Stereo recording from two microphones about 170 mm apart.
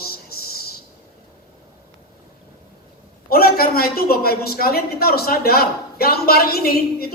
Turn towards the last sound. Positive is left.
turn(degrees=65)  # may be behind; listen again after turning